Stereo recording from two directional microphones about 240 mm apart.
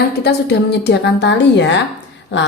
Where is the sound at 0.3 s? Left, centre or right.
Left.